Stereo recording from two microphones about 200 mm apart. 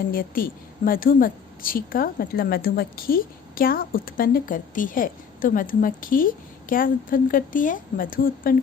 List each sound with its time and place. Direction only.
0.1 s a woman's voice: 45° left (ahead or behind)